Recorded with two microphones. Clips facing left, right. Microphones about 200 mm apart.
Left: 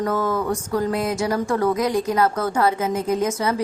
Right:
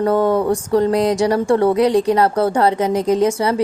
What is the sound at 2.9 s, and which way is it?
Speech, 75° right (ahead or behind).